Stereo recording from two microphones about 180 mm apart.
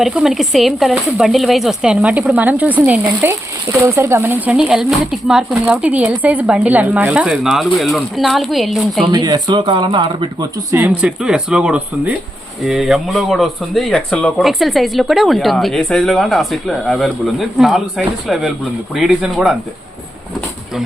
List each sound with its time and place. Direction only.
0.0 s speech: 5° right (ahead or behind)
9.1 s speech: 25° right (ahead or behind)
10.7 s speech: 10° right (ahead or behind)